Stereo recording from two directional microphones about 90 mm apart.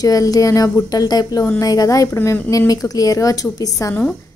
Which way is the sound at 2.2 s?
25° left (ahead or behind).